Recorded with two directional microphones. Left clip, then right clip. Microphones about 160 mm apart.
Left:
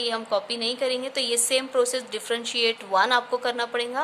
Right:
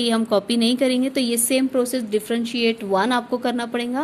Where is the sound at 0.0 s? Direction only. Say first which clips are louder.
Right 5 dB; 45° right (ahead or behind).